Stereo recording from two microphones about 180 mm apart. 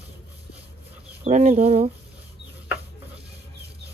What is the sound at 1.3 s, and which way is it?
Speech, 35° right (ahead or behind).